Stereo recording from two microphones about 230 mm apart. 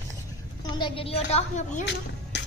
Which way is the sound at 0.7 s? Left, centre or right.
Left.